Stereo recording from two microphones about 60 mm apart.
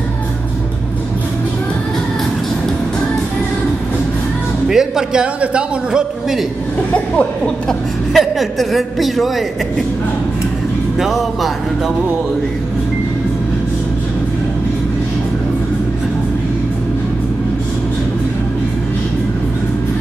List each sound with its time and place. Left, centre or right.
4.6 s a man's voice: centre
6.9 s speech: centre
8.1 s a woman's voice: centre
11.0 s a woman's voice: centre